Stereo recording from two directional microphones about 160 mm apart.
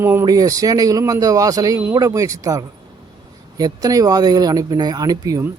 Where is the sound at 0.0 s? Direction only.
15° right (ahead or behind).